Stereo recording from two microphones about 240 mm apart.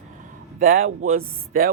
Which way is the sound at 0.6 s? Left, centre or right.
Right.